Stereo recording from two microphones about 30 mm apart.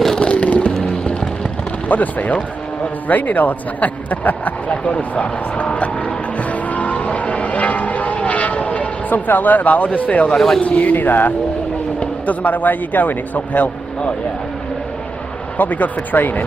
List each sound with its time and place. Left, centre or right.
0.2 s music: left
0.5 s music: left
1.9 s a man's voice: left
4.8 s vehicle: left
9.1 s a man's voice: left
9.8 s speech: left
10.3 s speech: centre
10.6 s a man's voice: left
12.0 s a man's voice: left
15.5 s a man's voice: left